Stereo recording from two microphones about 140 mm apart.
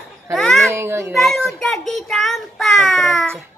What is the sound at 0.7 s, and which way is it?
Speech, 20° right (ahead or behind).